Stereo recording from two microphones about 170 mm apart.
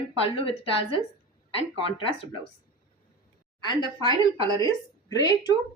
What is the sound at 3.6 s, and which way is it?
Speech, 25° left (ahead or behind).